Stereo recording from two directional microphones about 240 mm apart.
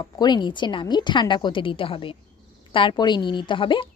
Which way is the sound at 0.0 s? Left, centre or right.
Centre.